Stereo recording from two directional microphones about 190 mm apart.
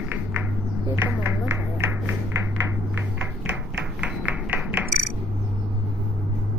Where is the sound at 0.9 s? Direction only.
10° right (ahead or behind).